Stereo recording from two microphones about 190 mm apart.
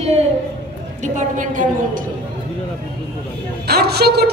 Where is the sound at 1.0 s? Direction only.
40° right (ahead or behind).